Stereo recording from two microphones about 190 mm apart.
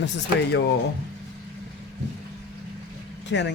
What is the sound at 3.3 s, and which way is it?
Speech, 75° left (ahead or behind).